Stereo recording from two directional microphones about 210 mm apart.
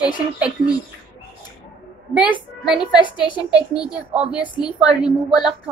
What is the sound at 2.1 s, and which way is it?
A woman's voice, 5° right (ahead or behind).